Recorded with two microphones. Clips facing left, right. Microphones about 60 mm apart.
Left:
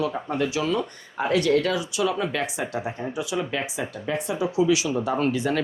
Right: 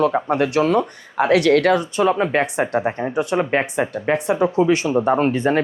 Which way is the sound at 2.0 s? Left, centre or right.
Right.